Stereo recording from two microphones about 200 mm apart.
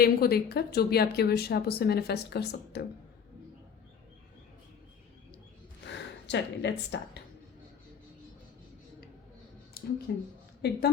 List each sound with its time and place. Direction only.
0.0 s speech: 50° left (ahead or behind)
5.9 s speech: 60° left (ahead or behind)
9.8 s a sound: 50° left (ahead or behind)
10.6 s speech: 50° left (ahead or behind)